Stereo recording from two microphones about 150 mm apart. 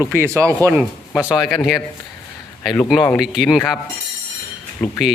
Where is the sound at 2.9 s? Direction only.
Centre (ahead or behind).